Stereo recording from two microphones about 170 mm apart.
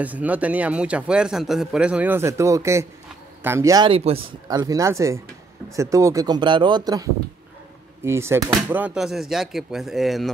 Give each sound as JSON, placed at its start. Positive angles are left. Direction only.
{"t": 0.0, "sound": "speech", "side_deg": -10}
{"t": 3.9, "sound": "speech", "side_deg": -35}
{"t": 4.5, "sound": "speech", "side_deg": -20}